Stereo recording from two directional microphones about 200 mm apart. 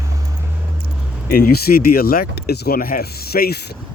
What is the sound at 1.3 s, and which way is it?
Speech, 50° left (ahead or behind).